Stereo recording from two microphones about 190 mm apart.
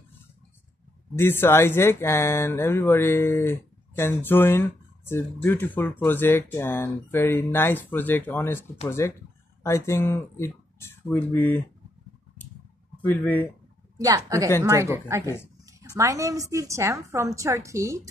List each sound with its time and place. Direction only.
1.1 s speech: 10° left (ahead or behind)
13.0 s speech: 10° left (ahead or behind)
13.9 s a woman's voice: 15° right (ahead or behind)